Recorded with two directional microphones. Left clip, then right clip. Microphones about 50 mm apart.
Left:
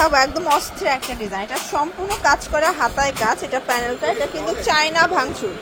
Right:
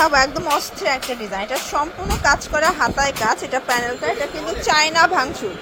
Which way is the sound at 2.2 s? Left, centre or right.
Centre.